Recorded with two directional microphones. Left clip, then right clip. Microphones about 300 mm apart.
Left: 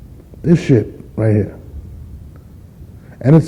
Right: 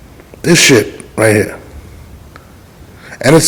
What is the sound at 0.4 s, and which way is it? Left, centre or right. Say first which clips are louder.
Speech: right 8 dB; centre.